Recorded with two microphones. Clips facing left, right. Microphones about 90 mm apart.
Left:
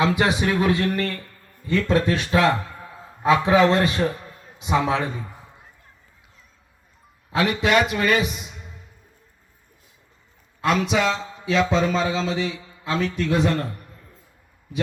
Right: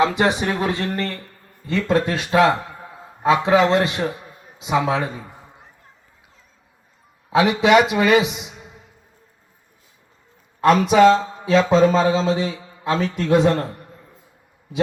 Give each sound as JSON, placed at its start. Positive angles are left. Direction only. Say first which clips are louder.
{"t": 0.1, "sound": "a man's voice", "louder": "right 1 dB", "side_deg": -25}
{"t": 2.9, "sound": "a sound", "louder": "right 1 dB", "side_deg": -15}
{"t": 3.3, "sound": "speech", "louder": "right 1 dB", "side_deg": -20}
{"t": 4.1, "sound": "a sound", "louder": "even", "side_deg": -15}
{"t": 4.6, "sound": "a man's voice", "louder": "right 1 dB", "side_deg": -5}
{"t": 7.3, "sound": "a man's voice", "louder": "right 6 dB", "side_deg": -20}
{"t": 10.6, "sound": "a man's voice", "louder": "right 8 dB", "side_deg": -45}